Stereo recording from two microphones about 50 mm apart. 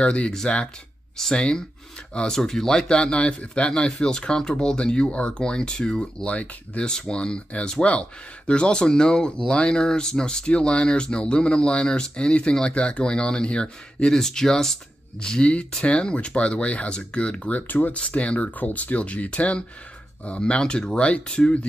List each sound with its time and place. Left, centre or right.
0.0 s speech: left
1.3 s speech: centre
14.1 s speech: centre
15.2 s speech: centre
17.6 s speech: left
17.9 s speech: left